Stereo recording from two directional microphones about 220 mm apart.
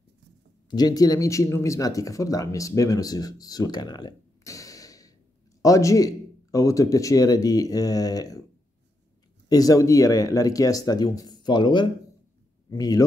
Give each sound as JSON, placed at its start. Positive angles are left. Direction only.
{"t": 0.7, "sound": "a man's voice", "side_deg": 20}
{"t": 9.5, "sound": "a man's voice", "side_deg": 15}